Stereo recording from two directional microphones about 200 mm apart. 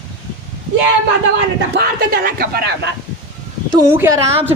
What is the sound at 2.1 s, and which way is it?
Speech, 45° right (ahead or behind).